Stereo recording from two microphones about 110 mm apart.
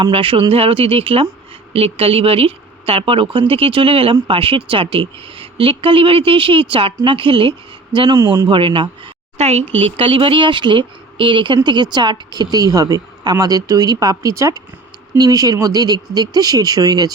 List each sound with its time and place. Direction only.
0.0 s a woman's voice: 55° right (ahead or behind)
9.4 s speech: 75° right (ahead or behind); by 17.1 s 35° right (ahead or behind)